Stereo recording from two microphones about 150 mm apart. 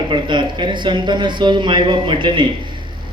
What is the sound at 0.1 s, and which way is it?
A man's voice, 30° right (ahead or behind).